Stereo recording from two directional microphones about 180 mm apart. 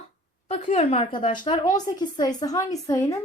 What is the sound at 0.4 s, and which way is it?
A woman's voice, 35° left (ahead or behind).